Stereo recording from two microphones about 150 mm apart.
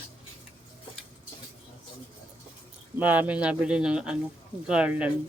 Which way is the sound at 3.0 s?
10° right (ahead or behind).